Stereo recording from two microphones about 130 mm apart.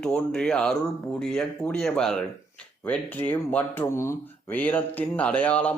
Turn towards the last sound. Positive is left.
turn(degrees=10)  # may be behind; listen again after turning